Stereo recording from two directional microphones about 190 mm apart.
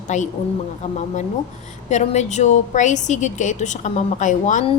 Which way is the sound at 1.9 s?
40° left (ahead or behind).